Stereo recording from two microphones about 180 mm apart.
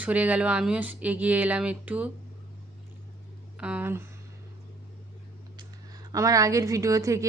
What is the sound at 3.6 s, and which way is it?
Speech, 5° right (ahead or behind).